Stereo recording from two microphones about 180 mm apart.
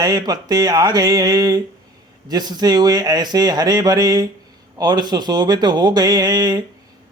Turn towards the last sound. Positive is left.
turn(degrees=-20)  # may be behind; listen again after turning